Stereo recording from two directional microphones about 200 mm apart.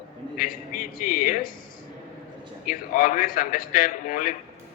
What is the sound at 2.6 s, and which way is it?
A man's voice, 45° left (ahead or behind).